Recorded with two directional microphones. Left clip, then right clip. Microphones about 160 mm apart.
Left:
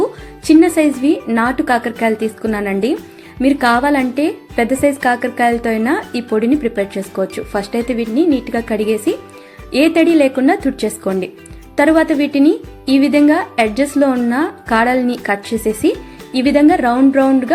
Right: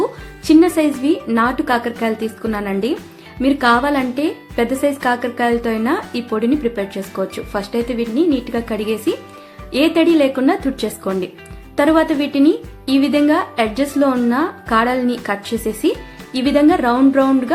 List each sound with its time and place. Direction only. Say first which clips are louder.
0.0 s music: left 2 dB; 25° left (ahead or behind)
1.0 s a woman's voice: left 1 dB; 25° left (ahead or behind)